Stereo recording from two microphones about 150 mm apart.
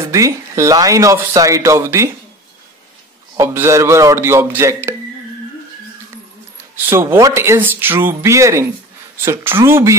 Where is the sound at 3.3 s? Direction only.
15° right (ahead or behind).